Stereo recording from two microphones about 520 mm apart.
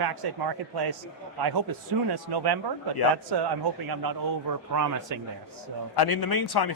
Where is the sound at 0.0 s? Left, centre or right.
Right.